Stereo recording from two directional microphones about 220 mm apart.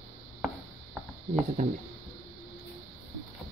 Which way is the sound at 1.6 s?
35° right (ahead or behind).